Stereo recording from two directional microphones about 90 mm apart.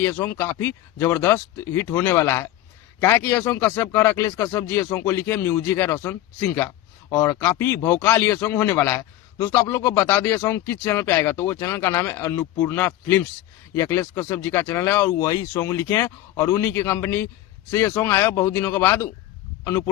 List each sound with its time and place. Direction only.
0.2 s speech: 30° left (ahead or behind)